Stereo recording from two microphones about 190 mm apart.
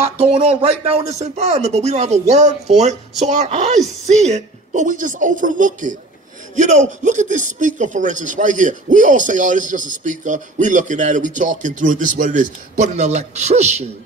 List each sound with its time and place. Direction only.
0.2 s a man's voice: 30° right (ahead or behind)
7.0 s a man's voice: 40° right (ahead or behind)